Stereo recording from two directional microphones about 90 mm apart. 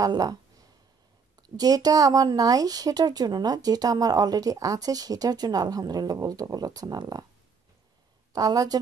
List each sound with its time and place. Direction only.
0.0 s speech: 45° right (ahead or behind)
1.6 s speech: 45° right (ahead or behind)
8.3 s a woman's voice: 45° right (ahead or behind)